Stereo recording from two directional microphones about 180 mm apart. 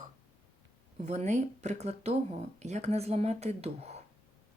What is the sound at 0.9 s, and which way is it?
Speech, 40° right (ahead or behind).